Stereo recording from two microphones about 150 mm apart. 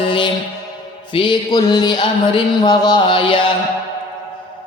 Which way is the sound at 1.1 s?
30° left (ahead or behind).